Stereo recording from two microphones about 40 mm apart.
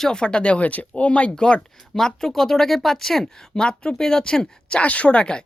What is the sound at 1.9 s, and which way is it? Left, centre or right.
Speech, centre.